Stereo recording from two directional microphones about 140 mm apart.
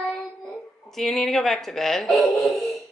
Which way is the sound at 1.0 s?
Centre (ahead or behind).